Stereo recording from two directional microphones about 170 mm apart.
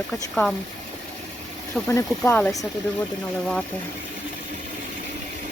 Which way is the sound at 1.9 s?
15° left (ahead or behind).